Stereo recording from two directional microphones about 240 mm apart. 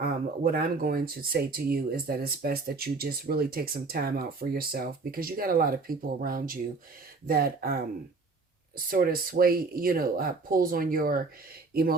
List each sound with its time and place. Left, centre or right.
0.0 s speech: right
8.9 s speech: right